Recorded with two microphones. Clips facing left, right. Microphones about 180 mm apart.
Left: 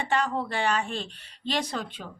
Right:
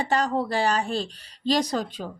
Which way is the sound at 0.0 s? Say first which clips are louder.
Right 3 dB; 40° right (ahead or behind).